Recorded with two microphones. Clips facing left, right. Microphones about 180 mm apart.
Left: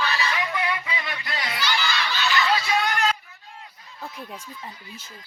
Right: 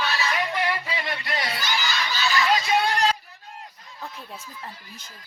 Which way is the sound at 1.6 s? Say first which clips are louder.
Left 1 dB; 45° right (ahead or behind).